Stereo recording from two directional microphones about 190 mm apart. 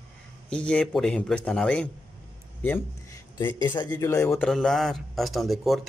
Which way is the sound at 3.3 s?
25° left (ahead or behind).